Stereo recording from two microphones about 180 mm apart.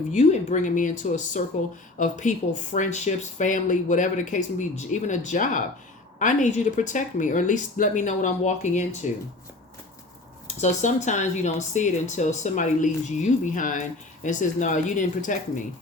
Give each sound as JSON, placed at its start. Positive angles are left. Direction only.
{"t": 0.1, "sound": "speech", "side_deg": 40}
{"t": 10.4, "sound": "speech", "side_deg": 40}